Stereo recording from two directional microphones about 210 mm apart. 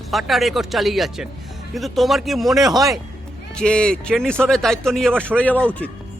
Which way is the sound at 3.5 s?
5° left (ahead or behind).